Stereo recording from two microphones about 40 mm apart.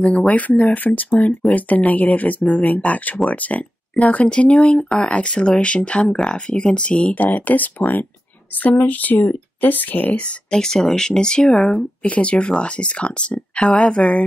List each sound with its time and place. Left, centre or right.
0.3 s speech: left
6.1 s speech: centre
7.2 s speech: left
10.5 s speech: centre
12.1 s speech: left